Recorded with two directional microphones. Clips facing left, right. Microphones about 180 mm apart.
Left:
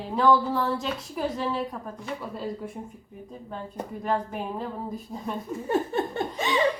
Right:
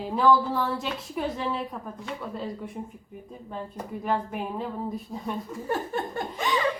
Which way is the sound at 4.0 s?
Centre (ahead or behind).